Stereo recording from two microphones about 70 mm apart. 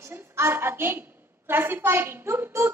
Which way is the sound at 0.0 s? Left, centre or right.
Right.